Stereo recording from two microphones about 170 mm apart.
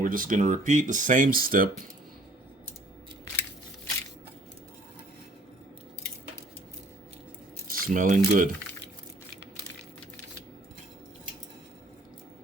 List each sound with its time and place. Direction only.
0.0 s speech: 55° right (ahead or behind)
7.7 s speech: 55° right (ahead or behind)